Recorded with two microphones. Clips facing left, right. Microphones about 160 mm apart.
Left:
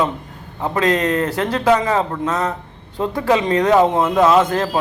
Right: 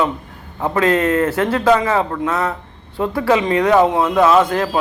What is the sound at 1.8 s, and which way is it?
Speech, 35° left (ahead or behind).